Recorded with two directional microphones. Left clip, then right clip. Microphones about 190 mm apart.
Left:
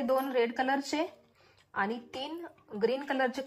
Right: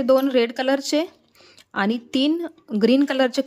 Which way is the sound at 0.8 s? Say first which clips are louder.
Right 10 dB; 40° right (ahead or behind).